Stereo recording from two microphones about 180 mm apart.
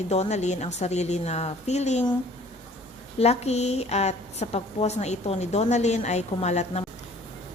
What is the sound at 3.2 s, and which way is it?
A woman's voice, 35° left (ahead or behind).